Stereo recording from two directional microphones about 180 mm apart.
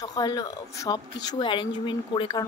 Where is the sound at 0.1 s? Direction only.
20° left (ahead or behind).